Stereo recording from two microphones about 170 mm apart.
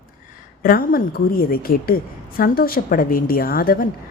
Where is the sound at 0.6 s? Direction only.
60° left (ahead or behind).